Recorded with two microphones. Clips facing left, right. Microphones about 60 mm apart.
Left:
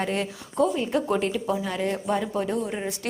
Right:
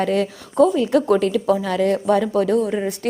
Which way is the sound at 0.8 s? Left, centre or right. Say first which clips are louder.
Right 8 dB; right.